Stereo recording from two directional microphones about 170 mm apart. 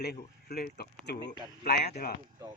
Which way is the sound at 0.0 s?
70° left (ahead or behind).